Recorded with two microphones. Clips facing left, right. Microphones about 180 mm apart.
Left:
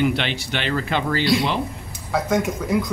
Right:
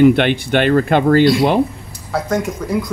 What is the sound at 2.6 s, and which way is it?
Speech, 5° left (ahead or behind).